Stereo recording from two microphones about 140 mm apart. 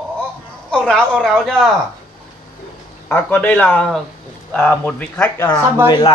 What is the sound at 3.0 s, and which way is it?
Speech, 10° left (ahead or behind).